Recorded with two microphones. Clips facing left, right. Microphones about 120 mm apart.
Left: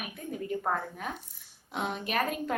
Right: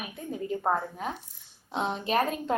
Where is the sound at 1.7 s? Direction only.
30° right (ahead or behind).